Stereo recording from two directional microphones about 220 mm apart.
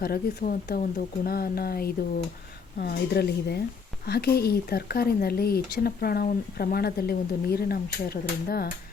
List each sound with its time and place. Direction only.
0.0 s speech: 45° left (ahead or behind)